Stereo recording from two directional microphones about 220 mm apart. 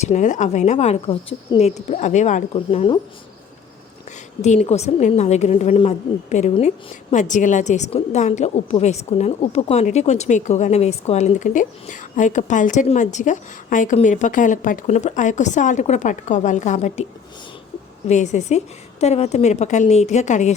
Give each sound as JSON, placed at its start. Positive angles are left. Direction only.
{"t": 0.0, "sound": "a woman's voice", "side_deg": 35}
{"t": 4.4, "sound": "a woman's voice", "side_deg": 30}
{"t": 18.1, "sound": "a woman's voice", "side_deg": 30}